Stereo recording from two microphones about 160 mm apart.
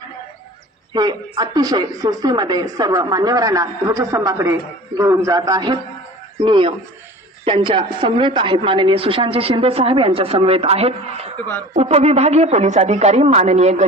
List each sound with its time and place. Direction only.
0.9 s a woman's voice: 25° right (ahead or behind); by 13.8 s 45° right (ahead or behind)